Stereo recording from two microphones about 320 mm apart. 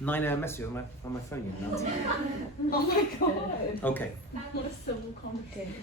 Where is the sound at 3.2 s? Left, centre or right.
Left.